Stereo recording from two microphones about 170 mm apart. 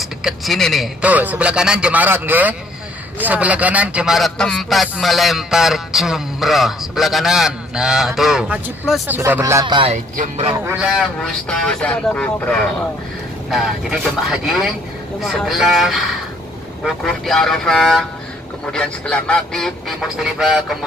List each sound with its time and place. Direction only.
0.0 s a sound: centre (ahead or behind)
1.0 s a man's voice: 10° right (ahead or behind)
10.1 s speech: 45° right (ahead or behind)
10.6 s a man's voice: 10° right (ahead or behind)
10.9 s a man's voice: centre (ahead or behind)